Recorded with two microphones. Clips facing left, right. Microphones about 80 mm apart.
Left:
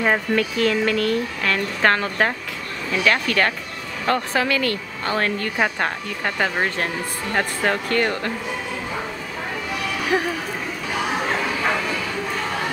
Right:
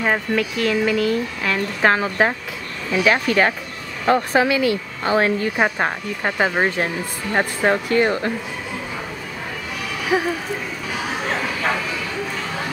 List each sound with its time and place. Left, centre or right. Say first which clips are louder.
0.0 s speech: even; centre
10.1 s speech: right 2 dB; centre